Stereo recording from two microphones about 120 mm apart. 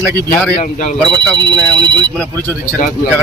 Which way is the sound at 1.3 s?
40° right (ahead or behind).